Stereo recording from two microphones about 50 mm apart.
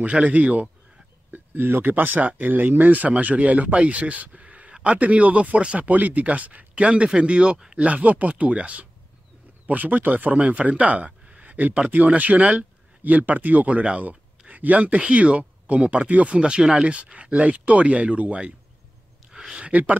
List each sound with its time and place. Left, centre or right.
0.0 s speech: right
1.3 s speech: right
19.3 s a sound: centre
19.7 s speech: right